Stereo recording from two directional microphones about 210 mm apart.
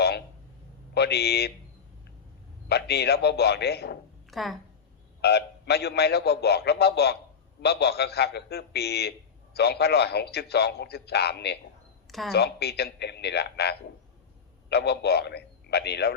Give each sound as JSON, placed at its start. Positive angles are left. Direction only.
{"t": 0.9, "sound": "a man's voice", "side_deg": 50}
{"t": 2.6, "sound": "a man's voice", "side_deg": 50}
{"t": 4.3, "sound": "a woman's voice", "side_deg": 0}
{"t": 5.2, "sound": "a man's voice", "side_deg": 50}